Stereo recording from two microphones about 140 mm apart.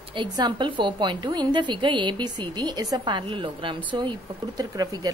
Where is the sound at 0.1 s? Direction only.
35° right (ahead or behind).